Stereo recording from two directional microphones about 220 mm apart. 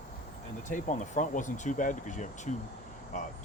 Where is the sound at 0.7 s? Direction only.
35° left (ahead or behind).